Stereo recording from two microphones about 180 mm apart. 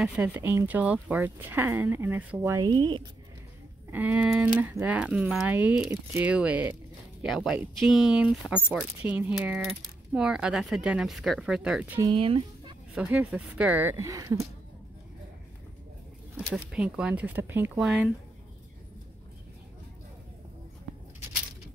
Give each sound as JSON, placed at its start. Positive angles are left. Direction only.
{"t": 0.0, "sound": "speech", "side_deg": -5}
{"t": 2.7, "sound": "speech", "side_deg": -25}
{"t": 3.9, "sound": "speech", "side_deg": -10}
{"t": 12.0, "sound": "speech", "side_deg": -30}
{"t": 12.9, "sound": "speech", "side_deg": -5}
{"t": 16.3, "sound": "speech", "side_deg": -5}